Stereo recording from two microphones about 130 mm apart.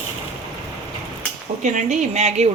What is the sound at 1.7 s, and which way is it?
Speech, 65° right (ahead or behind).